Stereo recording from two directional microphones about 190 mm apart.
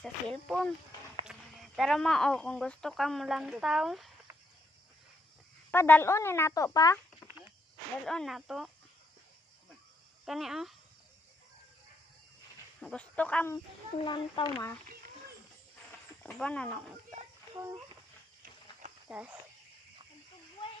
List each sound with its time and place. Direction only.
0.0 s speech: centre (ahead or behind)
5.7 s speech: 10° left (ahead or behind)
8.0 s speech: centre (ahead or behind)
10.2 s speech: centre (ahead or behind)
12.8 s speech: 5° left (ahead or behind)
14.0 s speech: 25° left (ahead or behind)
16.2 s speech: 5° left (ahead or behind)
17.1 s children playing: 15° right (ahead or behind)
19.0 s speech: 5° right (ahead or behind)